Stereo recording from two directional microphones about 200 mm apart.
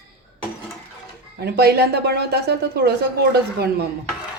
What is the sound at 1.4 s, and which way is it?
Speech, 55° right (ahead or behind).